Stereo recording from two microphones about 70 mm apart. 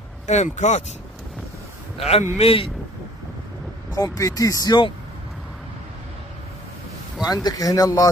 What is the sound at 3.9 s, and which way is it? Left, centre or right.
Speech, left.